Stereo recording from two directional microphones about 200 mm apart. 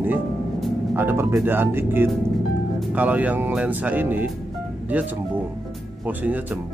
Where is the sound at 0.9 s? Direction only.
10° right (ahead or behind).